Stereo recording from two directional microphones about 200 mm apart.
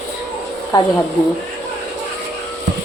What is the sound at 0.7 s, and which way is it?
Speech, 20° left (ahead or behind).